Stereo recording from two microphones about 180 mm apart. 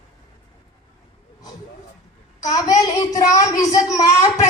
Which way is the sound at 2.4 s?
20° left (ahead or behind).